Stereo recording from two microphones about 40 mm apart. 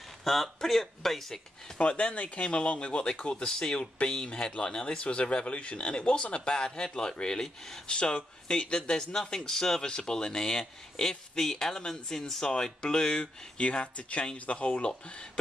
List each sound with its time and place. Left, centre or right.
0.2 s speech: centre
1.8 s speech: left; by 7.8 s centre
7.8 s speech: left